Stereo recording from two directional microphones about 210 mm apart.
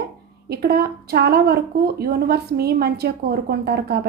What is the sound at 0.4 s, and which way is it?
A woman's voice, 50° right (ahead or behind).